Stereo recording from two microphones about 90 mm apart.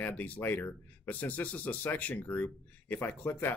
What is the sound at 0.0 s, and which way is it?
Speech, 15° left (ahead or behind).